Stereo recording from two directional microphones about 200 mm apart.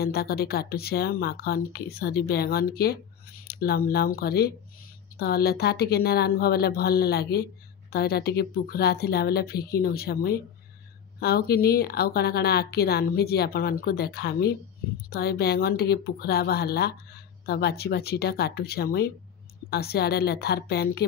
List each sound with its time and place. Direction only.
0.0 s speech: 50° left (ahead or behind)